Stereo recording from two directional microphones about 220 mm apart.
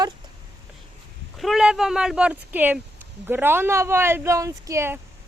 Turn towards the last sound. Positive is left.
turn(degrees=-10)  # may be behind; listen again after turning